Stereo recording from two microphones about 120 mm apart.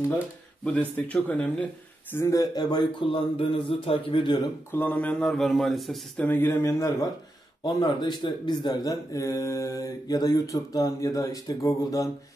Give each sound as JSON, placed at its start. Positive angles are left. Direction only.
{"t": 0.7, "sound": "speech", "side_deg": 10}
{"t": 2.1, "sound": "speech", "side_deg": 20}
{"t": 2.5, "sound": "a man's voice", "side_deg": 40}
{"t": 4.7, "sound": "a man's voice", "side_deg": 15}
{"t": 6.2, "sound": "speech", "side_deg": 15}
{"t": 7.6, "sound": "speech", "side_deg": 40}